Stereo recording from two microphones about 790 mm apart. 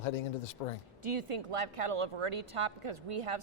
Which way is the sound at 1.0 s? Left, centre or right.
Right.